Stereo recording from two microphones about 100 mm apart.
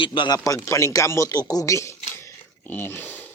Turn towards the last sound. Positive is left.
turn(degrees=20)  # may be behind; listen again after turning